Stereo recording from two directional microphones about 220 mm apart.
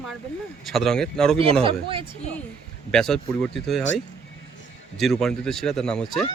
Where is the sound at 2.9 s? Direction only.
Centre (ahead or behind).